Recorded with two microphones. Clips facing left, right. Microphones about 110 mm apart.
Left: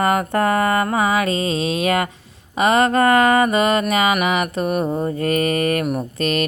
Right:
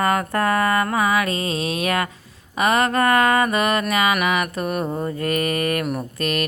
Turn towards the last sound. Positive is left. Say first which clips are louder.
# left 3 dB
turn(degrees=25)  # may be behind; listen again after turning